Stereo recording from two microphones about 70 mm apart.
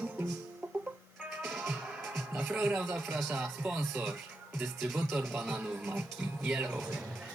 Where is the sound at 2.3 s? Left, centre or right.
Centre.